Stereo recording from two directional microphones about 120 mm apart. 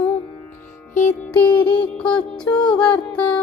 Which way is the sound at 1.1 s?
15° left (ahead or behind).